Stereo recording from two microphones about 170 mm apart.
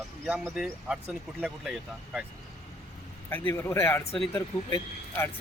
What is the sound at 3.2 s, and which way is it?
Speech, 15° left (ahead or behind).